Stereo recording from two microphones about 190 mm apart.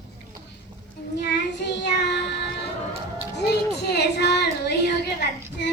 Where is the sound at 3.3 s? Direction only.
60° left (ahead or behind).